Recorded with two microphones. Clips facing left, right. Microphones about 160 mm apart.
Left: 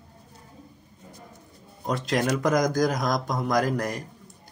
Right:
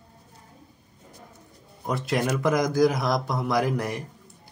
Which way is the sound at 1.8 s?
5° right (ahead or behind).